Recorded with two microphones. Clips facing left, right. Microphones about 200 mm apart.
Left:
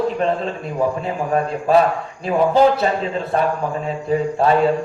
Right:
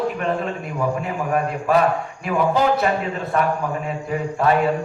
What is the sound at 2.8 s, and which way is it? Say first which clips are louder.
A man's voice: left 2 dB; 30° left (ahead or behind).